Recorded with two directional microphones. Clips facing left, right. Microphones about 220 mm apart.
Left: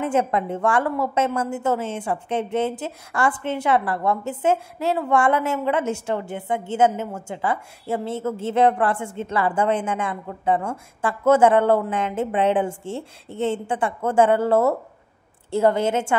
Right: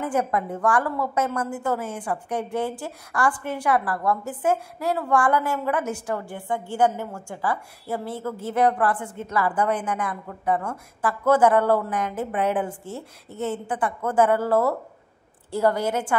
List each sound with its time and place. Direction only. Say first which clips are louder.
0.0 s a woman's voice: left 3 dB; 25° left (ahead or behind)